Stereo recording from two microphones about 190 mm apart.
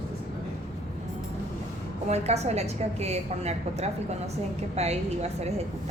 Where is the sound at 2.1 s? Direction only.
35° right (ahead or behind).